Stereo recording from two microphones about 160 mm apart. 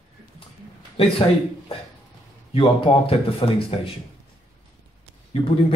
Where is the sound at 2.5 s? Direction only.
35° left (ahead or behind).